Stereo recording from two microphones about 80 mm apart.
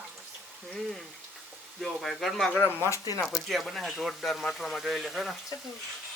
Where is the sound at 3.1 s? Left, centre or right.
Left.